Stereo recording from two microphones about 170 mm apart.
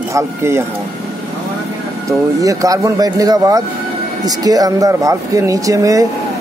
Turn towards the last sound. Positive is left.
turn(degrees=-20)  # may be behind; listen again after turning